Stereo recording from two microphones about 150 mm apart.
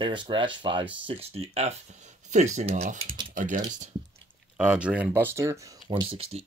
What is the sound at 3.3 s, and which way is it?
Speech, 60° right (ahead or behind).